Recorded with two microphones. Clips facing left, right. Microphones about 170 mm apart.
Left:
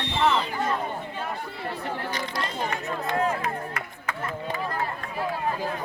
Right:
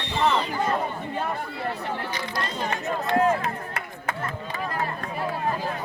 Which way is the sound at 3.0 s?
30° right (ahead or behind).